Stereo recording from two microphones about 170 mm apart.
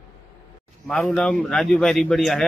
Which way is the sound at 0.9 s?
5° left (ahead or behind).